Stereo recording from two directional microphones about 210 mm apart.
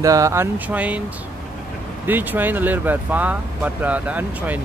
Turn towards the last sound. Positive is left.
turn(degrees=-5)  # may be behind; listen again after turning